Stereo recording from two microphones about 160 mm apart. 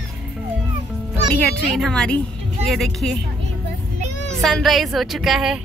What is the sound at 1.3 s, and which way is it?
A woman's voice, 5° left (ahead or behind).